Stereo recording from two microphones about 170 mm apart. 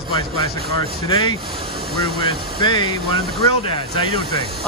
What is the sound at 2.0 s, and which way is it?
Speech, 65° right (ahead or behind).